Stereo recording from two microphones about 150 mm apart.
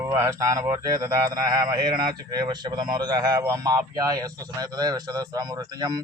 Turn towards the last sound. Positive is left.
turn(degrees=-25)  # may be behind; listen again after turning